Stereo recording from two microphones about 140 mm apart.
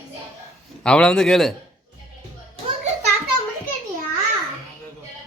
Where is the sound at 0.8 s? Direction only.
5° left (ahead or behind).